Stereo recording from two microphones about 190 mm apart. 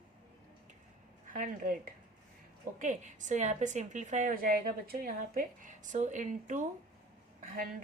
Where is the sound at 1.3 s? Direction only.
45° right (ahead or behind).